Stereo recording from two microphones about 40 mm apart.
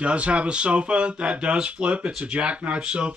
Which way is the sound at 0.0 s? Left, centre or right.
Right.